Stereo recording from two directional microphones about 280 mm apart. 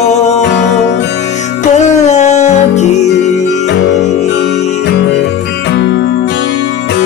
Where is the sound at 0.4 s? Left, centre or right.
Left.